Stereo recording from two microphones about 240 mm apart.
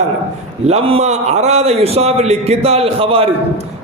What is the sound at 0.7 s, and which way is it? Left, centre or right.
A man's voice, right.